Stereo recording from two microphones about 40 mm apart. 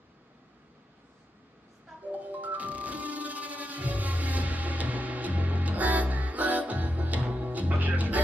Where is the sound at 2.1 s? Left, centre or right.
Right.